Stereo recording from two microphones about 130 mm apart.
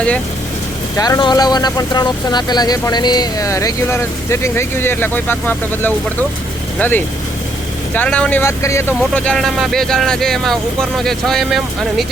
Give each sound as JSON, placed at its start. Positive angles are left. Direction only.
{"t": 0.9, "sound": "speech", "side_deg": 30}
{"t": 9.1, "sound": "speech", "side_deg": 5}